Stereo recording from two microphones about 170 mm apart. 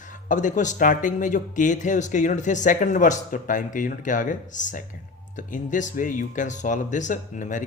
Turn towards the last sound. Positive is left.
turn(degrees=50)  # may be behind; listen again after turning